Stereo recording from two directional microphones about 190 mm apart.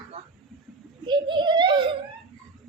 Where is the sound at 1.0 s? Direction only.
25° right (ahead or behind).